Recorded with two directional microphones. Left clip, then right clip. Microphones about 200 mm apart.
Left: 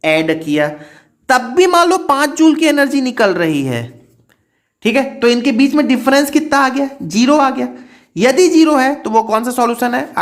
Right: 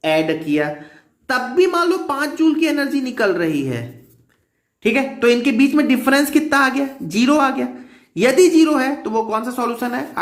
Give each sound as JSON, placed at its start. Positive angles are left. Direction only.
{"t": 0.0, "sound": "a woman's voice", "side_deg": 35}